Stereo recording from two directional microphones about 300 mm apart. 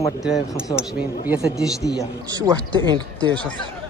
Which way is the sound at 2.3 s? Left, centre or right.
Centre.